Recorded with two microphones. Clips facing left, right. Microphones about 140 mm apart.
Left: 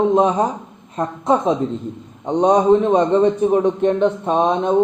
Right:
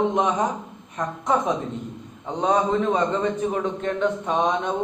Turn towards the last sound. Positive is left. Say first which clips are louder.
# left 5 dB
turn(degrees=25)  # may be behind; listen again after turning